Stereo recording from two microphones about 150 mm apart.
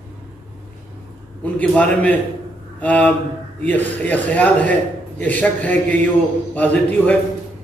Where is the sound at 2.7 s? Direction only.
10° left (ahead or behind).